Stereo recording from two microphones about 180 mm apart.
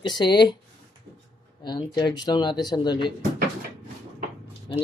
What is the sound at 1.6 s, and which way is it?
Speech, 25° left (ahead or behind).